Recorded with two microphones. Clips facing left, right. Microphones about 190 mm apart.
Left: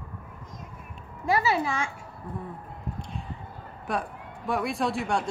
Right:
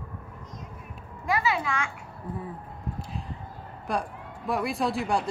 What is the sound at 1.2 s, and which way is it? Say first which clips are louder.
Speech: left 2 dB; 35° left (ahead or behind).